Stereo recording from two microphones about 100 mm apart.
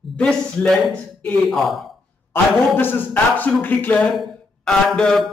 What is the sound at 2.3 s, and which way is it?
A man's voice, 20° left (ahead or behind).